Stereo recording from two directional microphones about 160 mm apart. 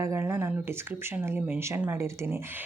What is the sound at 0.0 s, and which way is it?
Speech, 15° right (ahead or behind).